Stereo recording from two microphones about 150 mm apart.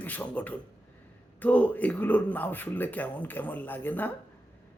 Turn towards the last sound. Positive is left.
turn(degrees=10)  # may be behind; listen again after turning